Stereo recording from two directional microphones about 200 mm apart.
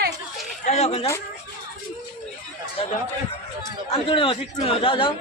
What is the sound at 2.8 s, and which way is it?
A man's voice, 30° left (ahead or behind).